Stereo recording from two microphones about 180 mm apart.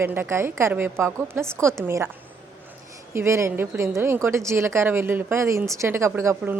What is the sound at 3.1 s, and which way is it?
A woman's voice, 15° right (ahead or behind).